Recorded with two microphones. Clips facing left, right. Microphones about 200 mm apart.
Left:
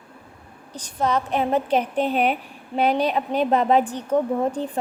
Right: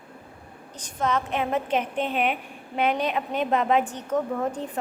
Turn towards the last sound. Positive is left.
turn(degrees=30)  # may be behind; listen again after turning